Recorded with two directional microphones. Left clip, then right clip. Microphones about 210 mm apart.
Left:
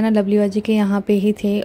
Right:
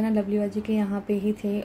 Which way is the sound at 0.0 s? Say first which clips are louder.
Left 9 dB; 50° left (ahead or behind).